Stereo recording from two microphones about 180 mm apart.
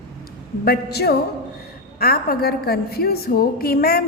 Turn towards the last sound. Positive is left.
turn(degrees=60)  # may be behind; listen again after turning